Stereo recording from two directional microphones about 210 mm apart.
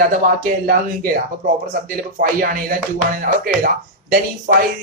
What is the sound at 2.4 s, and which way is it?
Speech, 45° right (ahead or behind).